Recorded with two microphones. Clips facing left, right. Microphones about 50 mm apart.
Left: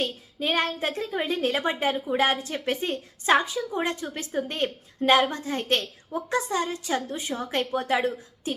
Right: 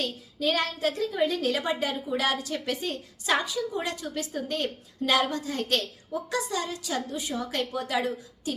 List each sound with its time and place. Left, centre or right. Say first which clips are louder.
0.0 s a woman's voice: even; left